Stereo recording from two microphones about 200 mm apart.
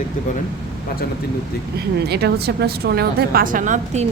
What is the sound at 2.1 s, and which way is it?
A woman's voice, 55° right (ahead or behind).